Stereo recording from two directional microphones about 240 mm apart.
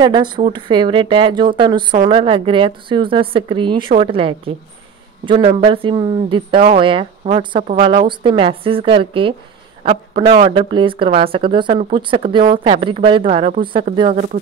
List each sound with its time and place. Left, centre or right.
0.0 s speech: centre